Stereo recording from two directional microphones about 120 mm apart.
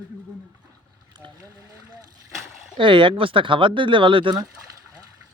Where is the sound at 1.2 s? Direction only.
40° right (ahead or behind).